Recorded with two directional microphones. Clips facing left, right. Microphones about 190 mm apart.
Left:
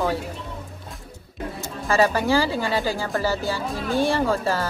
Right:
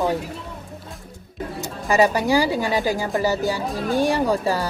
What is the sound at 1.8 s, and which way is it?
Speech, 15° right (ahead or behind).